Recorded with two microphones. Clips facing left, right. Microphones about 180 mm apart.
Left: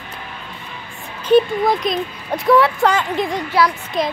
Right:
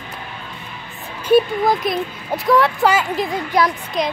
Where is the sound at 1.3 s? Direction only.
Centre (ahead or behind).